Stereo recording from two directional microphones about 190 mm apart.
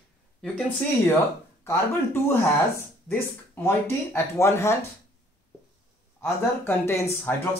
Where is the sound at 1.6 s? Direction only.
15° left (ahead or behind).